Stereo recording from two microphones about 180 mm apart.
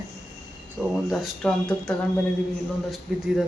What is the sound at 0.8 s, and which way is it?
Speech, centre (ahead or behind).